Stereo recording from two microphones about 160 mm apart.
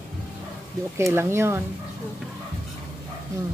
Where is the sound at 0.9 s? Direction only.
15° right (ahead or behind).